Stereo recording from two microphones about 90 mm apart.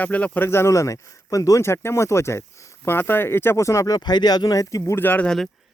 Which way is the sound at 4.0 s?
50° left (ahead or behind).